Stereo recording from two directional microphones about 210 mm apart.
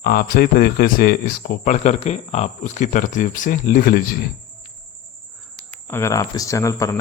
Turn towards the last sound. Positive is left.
turn(degrees=15)  # may be behind; listen again after turning